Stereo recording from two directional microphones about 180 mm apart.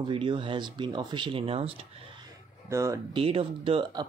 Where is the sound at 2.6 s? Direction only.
15° right (ahead or behind).